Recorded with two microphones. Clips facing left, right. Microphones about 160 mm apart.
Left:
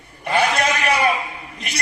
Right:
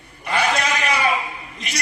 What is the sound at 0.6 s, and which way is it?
Speech, 55° left (ahead or behind).